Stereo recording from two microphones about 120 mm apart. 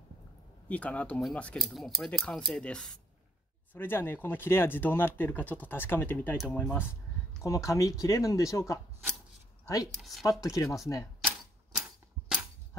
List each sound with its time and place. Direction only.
0.7 s speech: 10° left (ahead or behind)
6.3 s speech: 5° left (ahead or behind)
7.4 s speech: 25° left (ahead or behind)
10.4 s speech: 25° left (ahead or behind)
11.2 s typewriter: 10° right (ahead or behind)